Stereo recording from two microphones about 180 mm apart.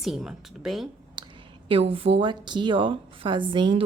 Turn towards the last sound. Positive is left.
turn(degrees=-30)  # may be behind; listen again after turning